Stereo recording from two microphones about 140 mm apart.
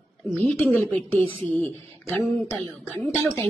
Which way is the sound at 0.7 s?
10° left (ahead or behind).